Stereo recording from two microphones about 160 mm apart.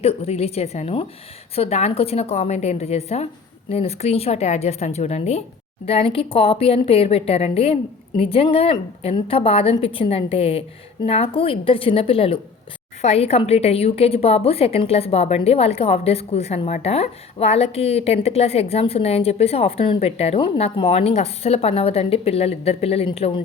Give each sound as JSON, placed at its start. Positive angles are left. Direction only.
{"t": 0.0, "sound": "a woman's voice", "side_deg": 40}